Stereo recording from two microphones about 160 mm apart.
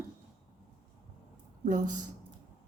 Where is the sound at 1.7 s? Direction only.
50° right (ahead or behind).